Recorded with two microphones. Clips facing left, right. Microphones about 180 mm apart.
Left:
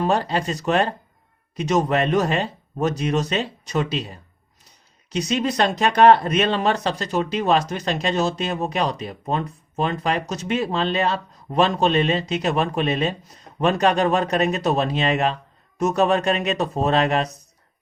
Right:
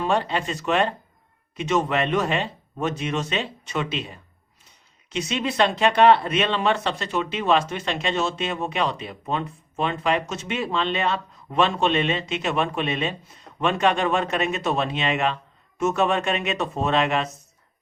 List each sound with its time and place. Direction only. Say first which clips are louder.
0.0 s speech: left 2 dB; 40° left (ahead or behind)